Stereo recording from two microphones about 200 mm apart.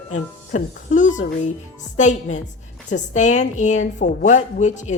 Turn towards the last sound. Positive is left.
turn(degrees=35)  # may be behind; listen again after turning